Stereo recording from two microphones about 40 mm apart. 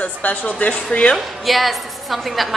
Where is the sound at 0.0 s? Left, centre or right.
Left.